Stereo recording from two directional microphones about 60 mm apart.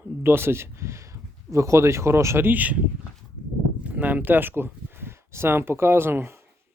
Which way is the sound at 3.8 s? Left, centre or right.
Right.